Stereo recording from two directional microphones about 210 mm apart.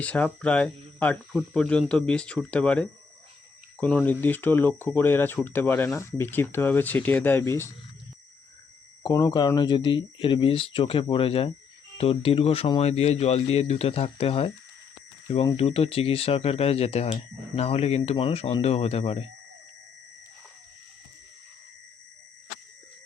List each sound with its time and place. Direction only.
0.0 s speech: 5° left (ahead or behind)
9.0 s speech: 20° left (ahead or behind)